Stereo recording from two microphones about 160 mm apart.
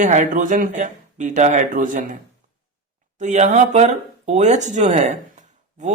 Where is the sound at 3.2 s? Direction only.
50° right (ahead or behind).